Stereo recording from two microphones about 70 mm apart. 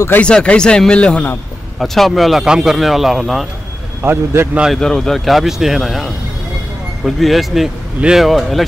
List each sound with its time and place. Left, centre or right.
0.2 s a man's voice: centre
1.8 s speech: centre
4.0 s a man's voice: right
4.7 s speech: centre